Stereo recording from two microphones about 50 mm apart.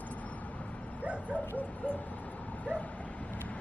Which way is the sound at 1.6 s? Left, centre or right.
Left.